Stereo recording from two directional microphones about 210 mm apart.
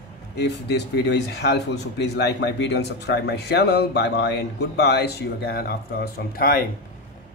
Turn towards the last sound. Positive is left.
turn(degrees=45)  # may be behind; listen again after turning